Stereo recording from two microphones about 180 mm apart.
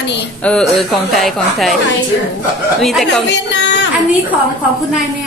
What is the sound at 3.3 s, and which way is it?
Speech, 75° left (ahead or behind).